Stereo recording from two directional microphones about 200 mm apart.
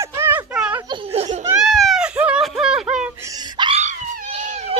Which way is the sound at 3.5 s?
30° right (ahead or behind).